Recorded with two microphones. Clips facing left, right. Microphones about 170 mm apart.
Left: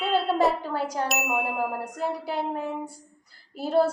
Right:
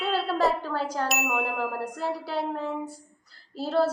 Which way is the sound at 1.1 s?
Centre (ahead or behind).